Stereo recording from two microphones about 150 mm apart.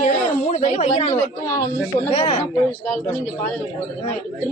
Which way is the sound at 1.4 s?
20° left (ahead or behind).